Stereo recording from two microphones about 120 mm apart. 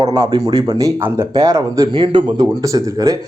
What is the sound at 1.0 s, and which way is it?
Speech, 20° right (ahead or behind).